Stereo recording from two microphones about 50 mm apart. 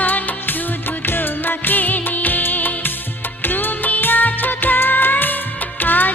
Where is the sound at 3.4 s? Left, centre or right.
Left.